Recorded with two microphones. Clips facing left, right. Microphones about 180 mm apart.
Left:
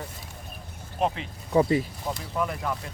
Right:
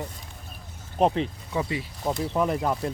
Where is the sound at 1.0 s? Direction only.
35° right (ahead or behind).